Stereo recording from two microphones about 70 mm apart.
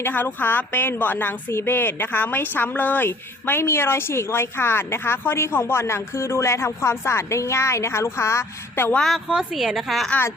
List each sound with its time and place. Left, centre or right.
0.0 s speech: left
9.3 s a woman's voice: centre